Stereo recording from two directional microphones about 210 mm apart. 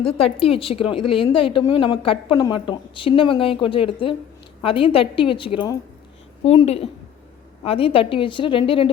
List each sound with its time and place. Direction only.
0.3 s speech: 25° left (ahead or behind)